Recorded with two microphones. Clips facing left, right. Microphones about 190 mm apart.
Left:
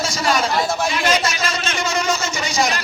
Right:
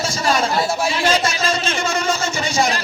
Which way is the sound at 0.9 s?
30° right (ahead or behind).